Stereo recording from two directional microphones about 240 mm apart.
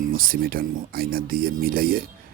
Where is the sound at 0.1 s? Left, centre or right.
Right.